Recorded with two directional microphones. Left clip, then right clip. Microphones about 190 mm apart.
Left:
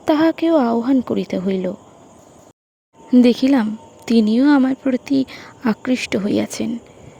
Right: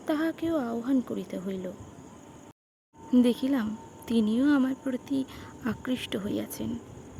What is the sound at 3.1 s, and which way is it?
A woman's voice, 35° left (ahead or behind).